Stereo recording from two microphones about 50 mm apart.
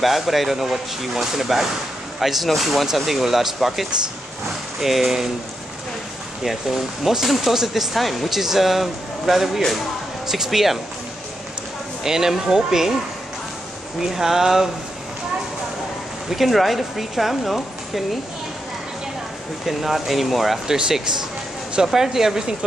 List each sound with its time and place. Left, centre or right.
0.0 s speech: centre
6.4 s speech: centre
12.0 s speech: centre
14.0 s speech: centre
16.3 s speech: centre
19.6 s speech: centre
20.6 s speech: centre